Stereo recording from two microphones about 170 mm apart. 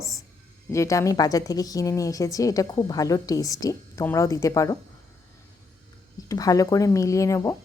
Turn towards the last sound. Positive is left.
turn(degrees=20)  # may be behind; listen again after turning